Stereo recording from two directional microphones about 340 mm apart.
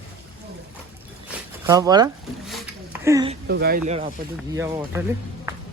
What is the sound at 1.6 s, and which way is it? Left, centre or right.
A man's voice, centre.